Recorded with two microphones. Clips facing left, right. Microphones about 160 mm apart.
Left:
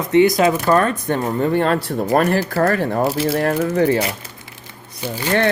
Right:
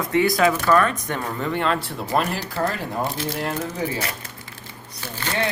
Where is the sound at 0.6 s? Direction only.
40° left (ahead or behind); by 4.0 s 65° left (ahead or behind).